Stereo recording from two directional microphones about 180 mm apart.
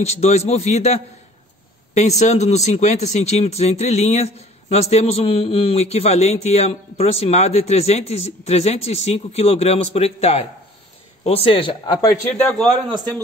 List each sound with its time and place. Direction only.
0.0 s speech: 35° left (ahead or behind)
12.4 s a man's voice: 5° left (ahead or behind)